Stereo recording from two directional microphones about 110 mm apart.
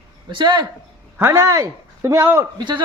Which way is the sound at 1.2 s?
30° right (ahead or behind).